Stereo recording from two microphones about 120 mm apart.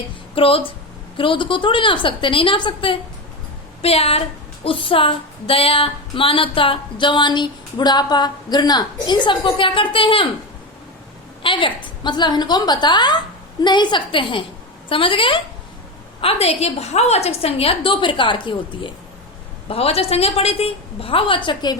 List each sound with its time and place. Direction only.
0.3 s music: 50° left (ahead or behind)
3.8 s a woman's voice: 55° left (ahead or behind)
4.6 s music: 50° left (ahead or behind)
11.4 s a woman's voice: 45° left (ahead or behind)
14.8 s music: 45° left (ahead or behind)
16.2 s a woman's voice: 60° left (ahead or behind); by 18.9 s 45° left (ahead or behind)
19.6 s a woman's voice: 55° left (ahead or behind); by 21.8 s 40° left (ahead or behind)